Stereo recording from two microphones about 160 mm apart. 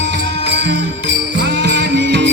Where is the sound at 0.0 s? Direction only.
90° right.